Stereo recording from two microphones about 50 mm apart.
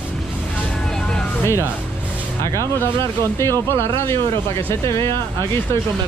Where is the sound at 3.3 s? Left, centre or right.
Left.